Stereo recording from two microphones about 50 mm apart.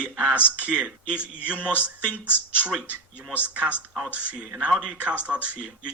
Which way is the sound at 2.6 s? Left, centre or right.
Right.